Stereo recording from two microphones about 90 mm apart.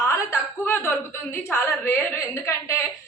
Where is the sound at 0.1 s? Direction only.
30° left (ahead or behind).